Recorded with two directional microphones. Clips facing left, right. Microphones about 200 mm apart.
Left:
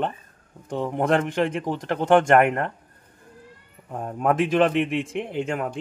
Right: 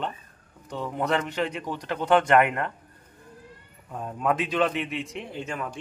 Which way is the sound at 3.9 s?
50° left (ahead or behind).